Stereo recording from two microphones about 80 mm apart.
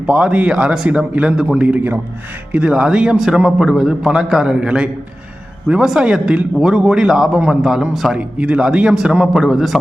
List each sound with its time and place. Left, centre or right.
0.0 s a man's voice: centre